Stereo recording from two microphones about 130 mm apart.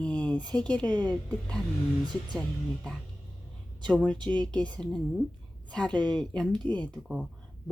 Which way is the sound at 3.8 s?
10° left (ahead or behind).